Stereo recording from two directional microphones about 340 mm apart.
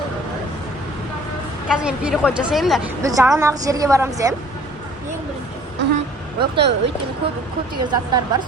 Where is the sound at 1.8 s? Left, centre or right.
Centre.